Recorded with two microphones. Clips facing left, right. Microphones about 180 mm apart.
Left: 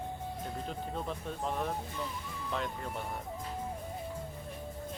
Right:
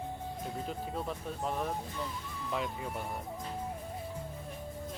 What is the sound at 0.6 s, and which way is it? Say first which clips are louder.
Speech: even; 5° right (ahead or behind).